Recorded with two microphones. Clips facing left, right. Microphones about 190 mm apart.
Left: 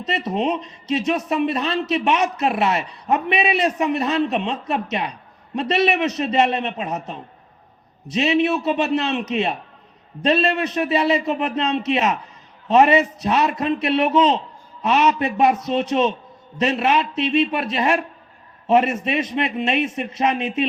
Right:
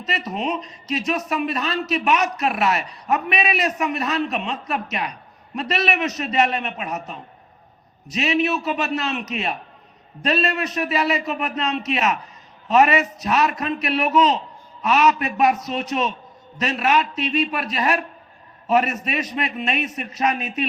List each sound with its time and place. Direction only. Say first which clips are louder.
0.0 s a man's voice: left 4 dB; 30° left (ahead or behind)